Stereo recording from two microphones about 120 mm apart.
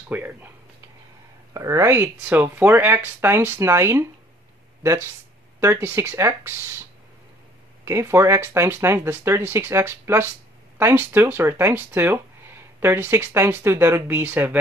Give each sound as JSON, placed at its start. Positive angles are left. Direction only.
{"t": 0.1, "sound": "speech", "side_deg": -15}
{"t": 1.5, "sound": "speech", "side_deg": -25}
{"t": 5.6, "sound": "speech", "side_deg": -20}
{"t": 7.8, "sound": "speech", "side_deg": -20}